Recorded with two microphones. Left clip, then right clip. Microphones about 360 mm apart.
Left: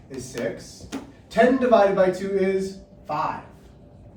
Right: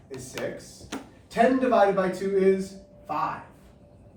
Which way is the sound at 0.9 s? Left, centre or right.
Right.